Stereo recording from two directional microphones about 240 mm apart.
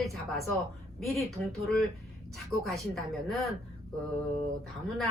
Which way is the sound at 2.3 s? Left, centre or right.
Centre.